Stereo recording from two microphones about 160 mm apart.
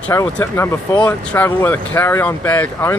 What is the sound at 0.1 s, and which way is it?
Speech, 15° left (ahead or behind).